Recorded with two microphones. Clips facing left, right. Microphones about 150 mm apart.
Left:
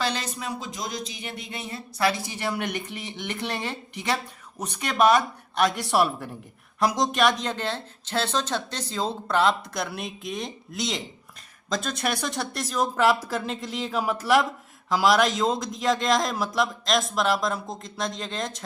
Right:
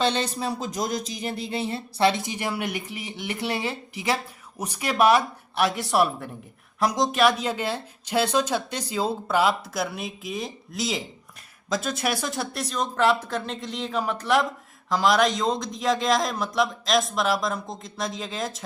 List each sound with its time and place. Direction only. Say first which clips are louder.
0.0 s speech: right 5 dB; 25° right (ahead or behind); by 18.6 s 5° right (ahead or behind)